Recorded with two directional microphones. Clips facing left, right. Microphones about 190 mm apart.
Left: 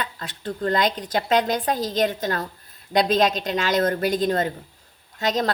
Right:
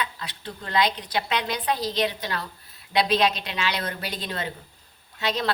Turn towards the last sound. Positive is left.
turn(degrees=45)  # may be behind; listen again after turning